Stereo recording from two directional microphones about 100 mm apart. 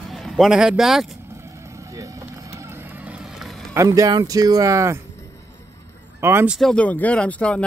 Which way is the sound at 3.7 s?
35° right (ahead or behind).